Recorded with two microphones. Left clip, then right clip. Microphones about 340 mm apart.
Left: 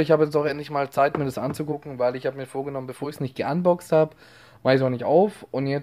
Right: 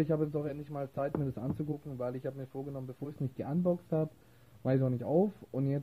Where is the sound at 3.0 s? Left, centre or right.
Left.